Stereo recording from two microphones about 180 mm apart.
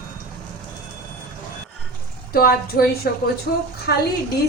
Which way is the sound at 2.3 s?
60° left (ahead or behind).